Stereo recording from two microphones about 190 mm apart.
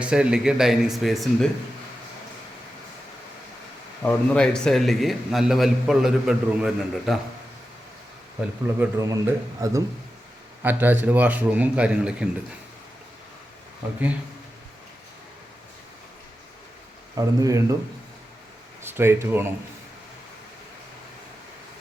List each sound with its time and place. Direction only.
0.0 s a man's voice: 5° right (ahead or behind)
4.0 s a man's voice: 5° left (ahead or behind)
8.4 s a man's voice: 10° right (ahead or behind)
17.2 s a man's voice: 15° right (ahead or behind)
18.8 s speech: 10° right (ahead or behind)